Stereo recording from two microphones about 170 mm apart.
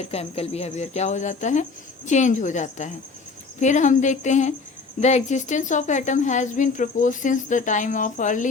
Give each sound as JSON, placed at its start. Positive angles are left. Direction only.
{"t": 0.0, "sound": "speech", "side_deg": 35}